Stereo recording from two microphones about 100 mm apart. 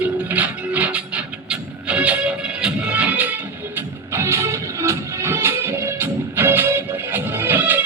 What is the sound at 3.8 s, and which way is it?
Music, 25° right (ahead or behind).